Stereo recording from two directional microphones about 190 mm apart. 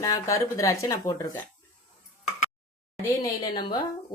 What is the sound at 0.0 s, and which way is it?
Speech, 15° left (ahead or behind).